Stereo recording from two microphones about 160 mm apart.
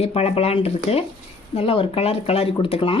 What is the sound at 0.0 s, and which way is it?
Speech, 40° left (ahead or behind).